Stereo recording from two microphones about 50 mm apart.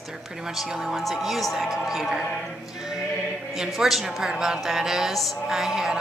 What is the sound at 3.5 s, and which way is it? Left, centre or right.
A woman's voice, centre.